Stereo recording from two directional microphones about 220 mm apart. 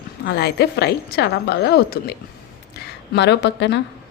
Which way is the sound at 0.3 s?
45° left (ahead or behind).